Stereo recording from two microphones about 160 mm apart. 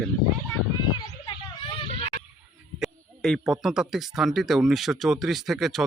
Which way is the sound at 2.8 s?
Centre (ahead or behind).